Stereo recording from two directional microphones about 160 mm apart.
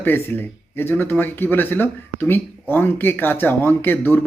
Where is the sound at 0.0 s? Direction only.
15° left (ahead or behind).